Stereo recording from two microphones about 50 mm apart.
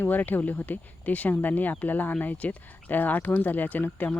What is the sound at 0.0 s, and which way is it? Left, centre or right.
Speech, left.